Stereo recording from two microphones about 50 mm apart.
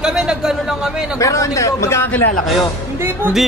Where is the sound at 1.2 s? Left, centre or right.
Left.